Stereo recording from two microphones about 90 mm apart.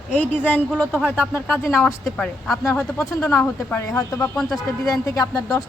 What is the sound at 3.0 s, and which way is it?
Speech, 35° left (ahead or behind).